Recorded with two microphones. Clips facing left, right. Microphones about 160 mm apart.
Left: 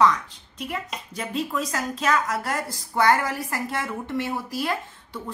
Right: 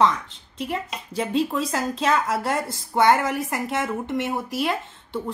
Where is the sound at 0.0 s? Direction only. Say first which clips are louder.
Even; 25° right (ahead or behind).